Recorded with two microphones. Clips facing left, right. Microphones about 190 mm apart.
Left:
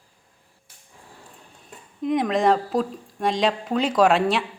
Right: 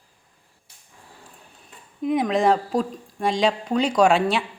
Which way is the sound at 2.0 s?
Centre (ahead or behind).